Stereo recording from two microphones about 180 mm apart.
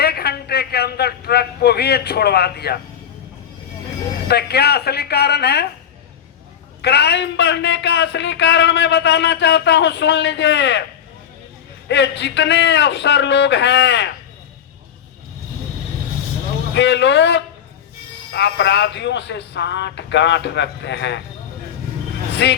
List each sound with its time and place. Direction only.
0.0 s a man's voice: 60° left (ahead or behind)
4.3 s speech: 65° left (ahead or behind)
6.8 s a man's voice: 70° left (ahead or behind)
11.9 s a man's voice: 75° left (ahead or behind)
16.7 s a man's voice: 75° left (ahead or behind)
22.4 s a man's voice: 75° left (ahead or behind)